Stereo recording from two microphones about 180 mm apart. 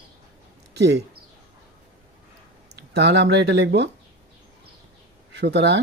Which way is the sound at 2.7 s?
70° right (ahead or behind).